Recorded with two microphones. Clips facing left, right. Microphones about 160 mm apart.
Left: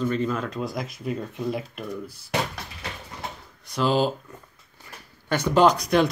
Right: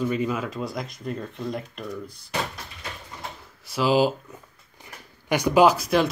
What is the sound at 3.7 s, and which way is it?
Speech, 5° right (ahead or behind).